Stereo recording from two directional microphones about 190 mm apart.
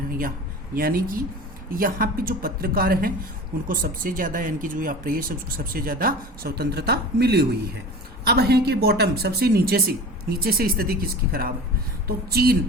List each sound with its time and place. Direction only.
0.2 s speech: 50° right (ahead or behind)